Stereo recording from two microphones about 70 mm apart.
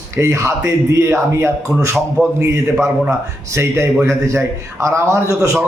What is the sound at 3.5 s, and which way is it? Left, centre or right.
A man's voice, right.